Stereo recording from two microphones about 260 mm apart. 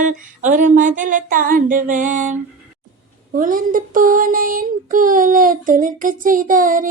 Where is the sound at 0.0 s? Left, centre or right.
Right.